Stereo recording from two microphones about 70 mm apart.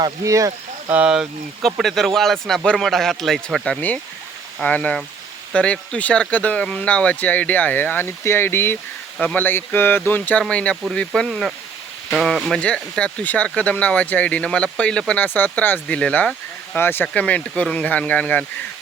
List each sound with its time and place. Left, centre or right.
0.3 s speech: right
1.0 s speech: centre
1.8 s a man's voice: centre
3.8 s speech: left
11.3 s a man's voice: centre
12.5 s speech: centre
15.2 s speech: left
16.7 s speech: left
17.2 s speech: centre